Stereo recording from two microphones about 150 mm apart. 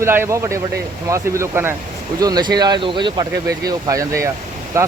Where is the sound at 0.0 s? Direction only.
15° right (ahead or behind).